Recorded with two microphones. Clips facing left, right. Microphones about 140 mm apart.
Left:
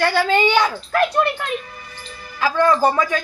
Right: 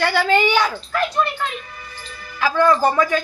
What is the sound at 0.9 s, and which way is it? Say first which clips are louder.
Speech: left 4 dB; 60° left (ahead or behind).